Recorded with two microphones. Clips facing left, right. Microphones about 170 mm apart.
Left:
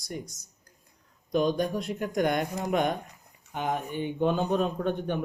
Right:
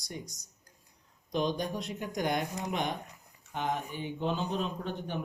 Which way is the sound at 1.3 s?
50° left (ahead or behind).